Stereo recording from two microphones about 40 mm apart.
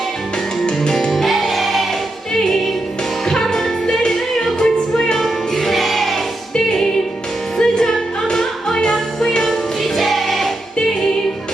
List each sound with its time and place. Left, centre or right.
0.9 s music: centre
3.2 s music: centre
7.6 s music: centre
8.8 s music: centre
10.0 s music: centre